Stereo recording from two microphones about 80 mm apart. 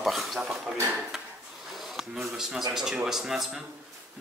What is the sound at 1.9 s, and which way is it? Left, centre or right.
Speech, centre.